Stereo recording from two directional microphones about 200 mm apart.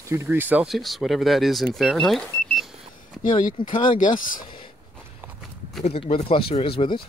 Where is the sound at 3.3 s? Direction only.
40° left (ahead or behind).